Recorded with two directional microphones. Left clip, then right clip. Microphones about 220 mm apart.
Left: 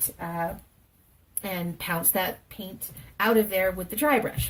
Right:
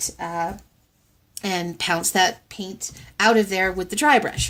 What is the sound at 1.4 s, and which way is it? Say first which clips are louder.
Speech: right 8 dB; 35° right (ahead or behind).